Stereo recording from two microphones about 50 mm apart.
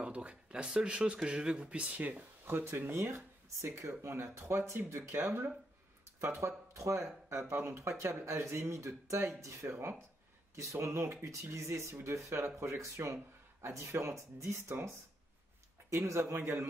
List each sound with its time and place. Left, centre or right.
0.0 s speech: right
2.4 s speech: right
6.2 s speech: right
9.4 s speech: right
11.5 s speech: right
12.8 s speech: right
15.9 s speech: right